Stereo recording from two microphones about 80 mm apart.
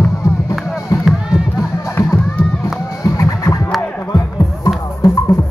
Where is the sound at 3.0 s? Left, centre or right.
Left.